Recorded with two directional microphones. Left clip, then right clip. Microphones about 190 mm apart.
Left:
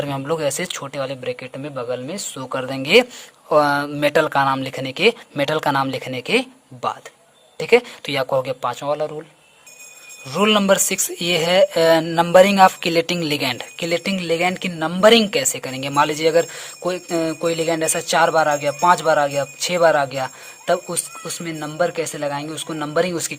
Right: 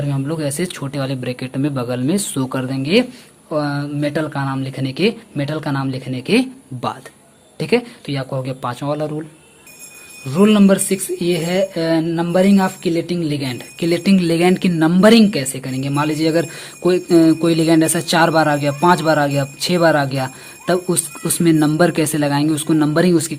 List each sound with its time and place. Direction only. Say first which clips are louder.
0.0 s speech: left 2 dB; 35° left (ahead or behind); by 2.6 s 15° left (ahead or behind)
2.6 s speech: left 3 dB; 30° left (ahead or behind)
10.2 s speech: right 1 dB; 30° left (ahead or behind)